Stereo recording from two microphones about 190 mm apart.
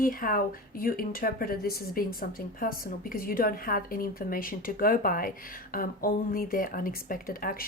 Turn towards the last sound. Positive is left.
turn(degrees=50)  # may be behind; listen again after turning